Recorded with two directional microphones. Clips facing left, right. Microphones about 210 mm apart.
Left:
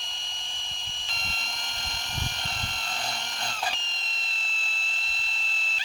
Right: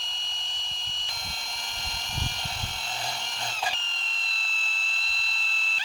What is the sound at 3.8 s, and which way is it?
Alarm, 15° left (ahead or behind).